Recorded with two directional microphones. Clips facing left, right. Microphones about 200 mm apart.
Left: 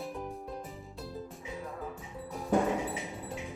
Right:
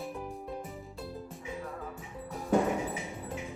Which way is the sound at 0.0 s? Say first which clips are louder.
Even; centre (ahead or behind).